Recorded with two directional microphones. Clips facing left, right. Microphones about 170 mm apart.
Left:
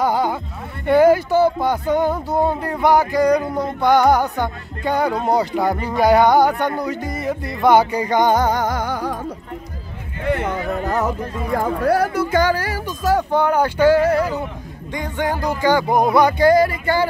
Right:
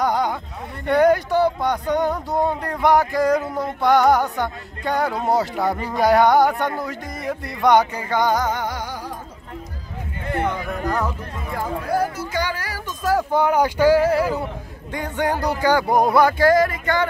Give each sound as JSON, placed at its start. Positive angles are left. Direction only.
{"t": 0.0, "sound": "music", "side_deg": 5}
{"t": 11.5, "sound": "speech", "side_deg": 65}
{"t": 12.5, "sound": "speech", "side_deg": 25}
{"t": 12.8, "sound": "music", "side_deg": 0}
{"t": 13.3, "sound": "speech", "side_deg": -10}
{"t": 15.9, "sound": "music", "side_deg": 10}
{"t": 16.4, "sound": "speech", "side_deg": 30}